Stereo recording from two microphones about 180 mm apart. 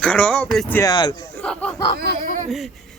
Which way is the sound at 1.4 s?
5° left (ahead or behind).